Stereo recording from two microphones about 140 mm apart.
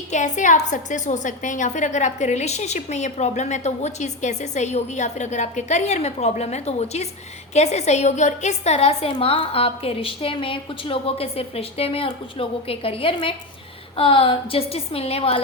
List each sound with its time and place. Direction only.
0.1 s a woman's voice: 60° left (ahead or behind); by 15.4 s 45° left (ahead or behind)